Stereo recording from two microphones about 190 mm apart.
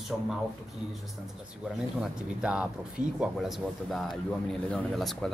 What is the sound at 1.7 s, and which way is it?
Speech, 5° right (ahead or behind).